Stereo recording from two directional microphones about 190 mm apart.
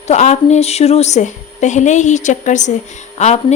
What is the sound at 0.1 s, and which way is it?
A woman's voice, 35° left (ahead or behind).